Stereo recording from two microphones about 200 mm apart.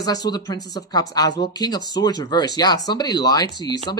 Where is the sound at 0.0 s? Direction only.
20° left (ahead or behind).